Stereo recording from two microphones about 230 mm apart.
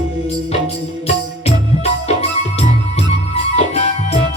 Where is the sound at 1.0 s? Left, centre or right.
Left.